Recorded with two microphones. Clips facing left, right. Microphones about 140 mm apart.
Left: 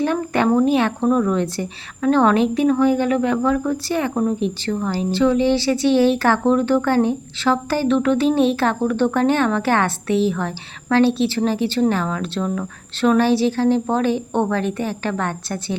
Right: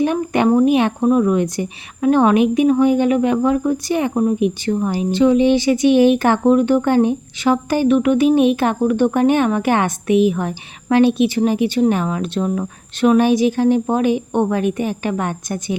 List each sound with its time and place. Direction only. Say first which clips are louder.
0.0 s speech: right 3 dB; 15° right (ahead or behind)